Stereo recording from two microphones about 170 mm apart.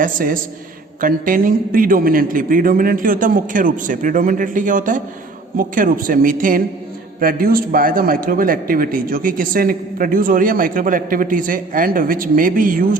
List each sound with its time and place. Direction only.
0.0 s a man's voice: 55° right (ahead or behind)